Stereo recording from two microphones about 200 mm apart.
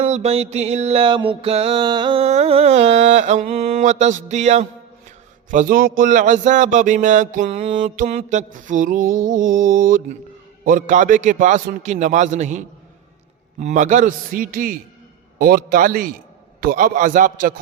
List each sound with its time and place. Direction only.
0.0 s music: 30° right (ahead or behind)
5.5 s a man's voice: 45° right (ahead or behind)
6.0 s music: 40° right (ahead or behind)
15.4 s a man's voice: 45° right (ahead or behind)
16.6 s music: 45° right (ahead or behind)